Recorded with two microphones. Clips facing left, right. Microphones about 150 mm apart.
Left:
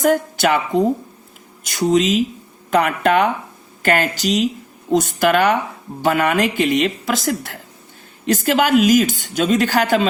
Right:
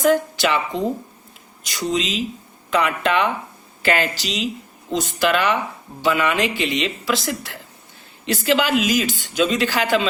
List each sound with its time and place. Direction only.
0.0 s a woman's voice: 45° left (ahead or behind)